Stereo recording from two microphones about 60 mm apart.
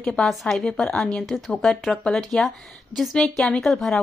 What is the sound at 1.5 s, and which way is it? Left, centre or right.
A woman's voice, centre.